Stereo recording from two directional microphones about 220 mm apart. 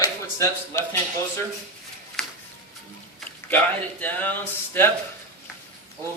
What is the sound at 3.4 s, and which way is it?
Speech, 10° left (ahead or behind).